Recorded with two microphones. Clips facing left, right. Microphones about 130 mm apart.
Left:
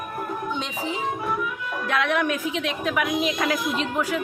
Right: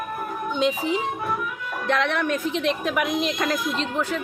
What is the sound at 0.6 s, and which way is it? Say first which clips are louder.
A woman's voice: right 6 dB; centre (ahead or behind).